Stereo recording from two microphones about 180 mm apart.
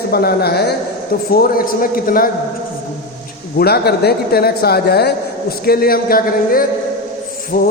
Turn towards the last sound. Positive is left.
turn(degrees=55)  # may be behind; listen again after turning